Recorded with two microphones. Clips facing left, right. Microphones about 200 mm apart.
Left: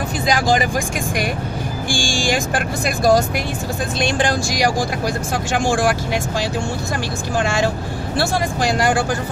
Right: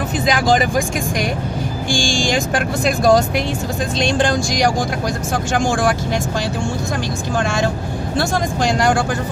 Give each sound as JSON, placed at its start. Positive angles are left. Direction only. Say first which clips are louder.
{"t": 2.2, "sound": "speech", "louder": "right 1 dB", "side_deg": 5}
{"t": 7.3, "sound": "speech", "louder": "left 1 dB", "side_deg": 5}